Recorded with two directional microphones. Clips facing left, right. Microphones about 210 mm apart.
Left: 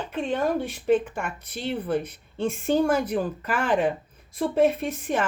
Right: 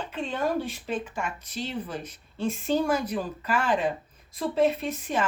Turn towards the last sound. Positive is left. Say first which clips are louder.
# left 2 dB
turn(degrees=55)  # may be behind; listen again after turning